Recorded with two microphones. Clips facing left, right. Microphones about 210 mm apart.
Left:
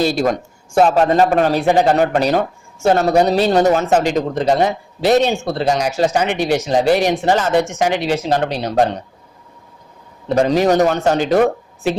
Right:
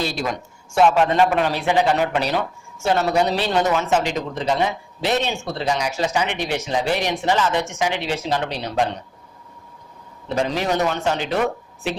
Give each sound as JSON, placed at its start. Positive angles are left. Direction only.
{"t": 0.0, "sound": "a man's voice", "side_deg": 40}
{"t": 10.2, "sound": "speech", "side_deg": 40}